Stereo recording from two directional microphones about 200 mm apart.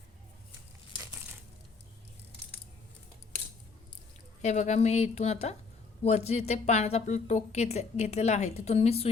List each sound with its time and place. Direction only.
4.4 s a woman's voice: 35° left (ahead or behind)